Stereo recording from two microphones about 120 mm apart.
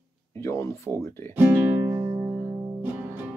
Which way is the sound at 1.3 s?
20° right (ahead or behind).